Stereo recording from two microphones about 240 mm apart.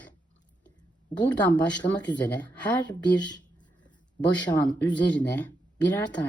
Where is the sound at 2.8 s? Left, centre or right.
Centre.